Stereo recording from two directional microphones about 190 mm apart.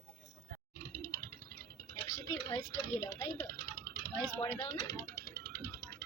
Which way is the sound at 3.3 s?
15° right (ahead or behind).